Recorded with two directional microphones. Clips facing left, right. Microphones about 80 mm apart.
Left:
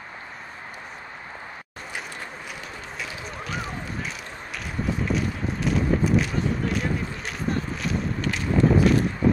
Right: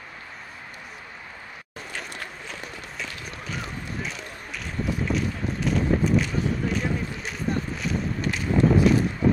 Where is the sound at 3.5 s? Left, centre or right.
Centre.